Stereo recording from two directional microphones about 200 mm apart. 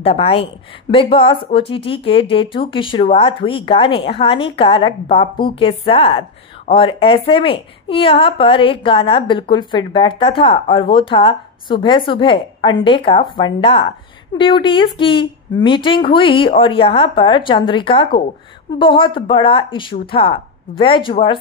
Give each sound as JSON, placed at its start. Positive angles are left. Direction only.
{"t": 0.0, "sound": "a woman's voice", "side_deg": 30}